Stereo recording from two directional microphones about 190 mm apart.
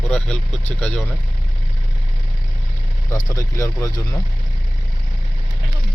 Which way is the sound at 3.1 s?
20° left (ahead or behind).